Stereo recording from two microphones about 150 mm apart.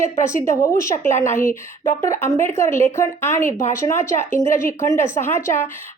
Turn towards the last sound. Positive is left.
turn(degrees=15)  # may be behind; listen again after turning